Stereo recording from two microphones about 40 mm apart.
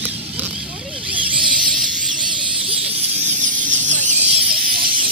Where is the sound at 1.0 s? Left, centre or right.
Right.